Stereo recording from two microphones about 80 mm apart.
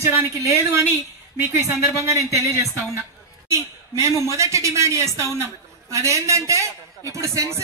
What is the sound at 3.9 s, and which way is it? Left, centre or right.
A man's voice, right.